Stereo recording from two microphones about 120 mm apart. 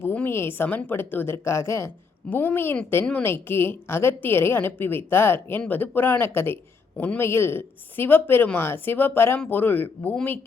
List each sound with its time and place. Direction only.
0.0 s a woman's voice: 15° left (ahead or behind)